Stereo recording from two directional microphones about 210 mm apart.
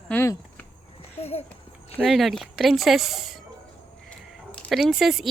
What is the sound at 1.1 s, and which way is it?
Speech, 30° left (ahead or behind).